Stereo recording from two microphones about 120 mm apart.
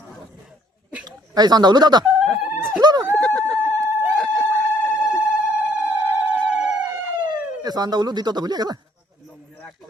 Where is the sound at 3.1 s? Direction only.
5° left (ahead or behind).